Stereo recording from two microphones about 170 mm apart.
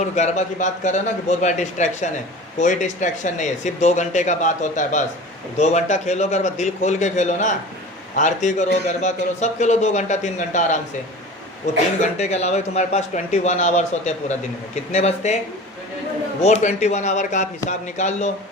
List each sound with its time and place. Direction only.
0.0 s a man's voice: 45° left (ahead or behind)
16.4 s a man's voice: 40° left (ahead or behind)